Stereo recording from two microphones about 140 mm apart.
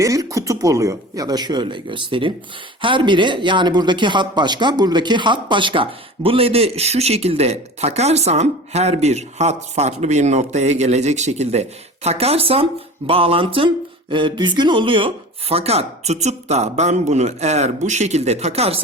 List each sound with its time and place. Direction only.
0.0 s speech: 25° right (ahead or behind); by 18.8 s 45° right (ahead or behind)